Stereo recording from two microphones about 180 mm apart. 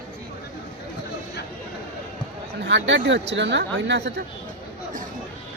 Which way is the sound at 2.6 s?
90° right.